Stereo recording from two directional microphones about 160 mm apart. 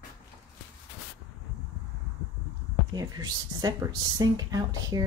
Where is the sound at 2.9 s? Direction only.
25° right (ahead or behind).